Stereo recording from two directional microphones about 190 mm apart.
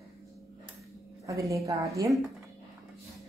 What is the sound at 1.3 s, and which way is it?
Speech, 15° right (ahead or behind).